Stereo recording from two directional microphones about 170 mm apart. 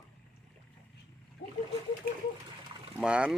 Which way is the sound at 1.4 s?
65° left (ahead or behind).